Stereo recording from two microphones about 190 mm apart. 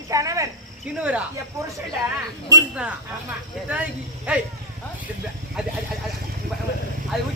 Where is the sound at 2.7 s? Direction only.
5° right (ahead or behind).